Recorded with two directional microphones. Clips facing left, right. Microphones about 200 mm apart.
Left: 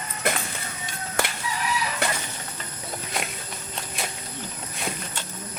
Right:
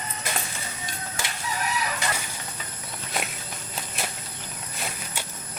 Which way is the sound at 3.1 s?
Centre (ahead or behind).